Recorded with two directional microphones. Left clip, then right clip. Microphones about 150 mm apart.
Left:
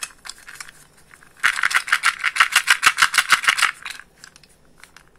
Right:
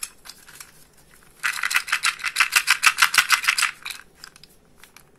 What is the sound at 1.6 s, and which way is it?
Rattle, 10° left (ahead or behind).